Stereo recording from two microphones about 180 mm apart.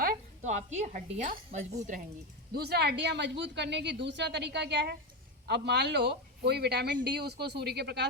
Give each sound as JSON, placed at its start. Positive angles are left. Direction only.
{"t": 0.0, "sound": "a woman's voice", "side_deg": -45}
{"t": 2.5, "sound": "speech", "side_deg": -60}